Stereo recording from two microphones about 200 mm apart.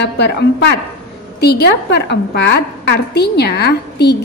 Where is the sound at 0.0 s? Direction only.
55° left (ahead or behind).